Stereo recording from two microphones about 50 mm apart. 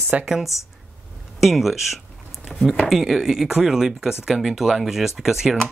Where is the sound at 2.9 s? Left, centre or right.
Centre.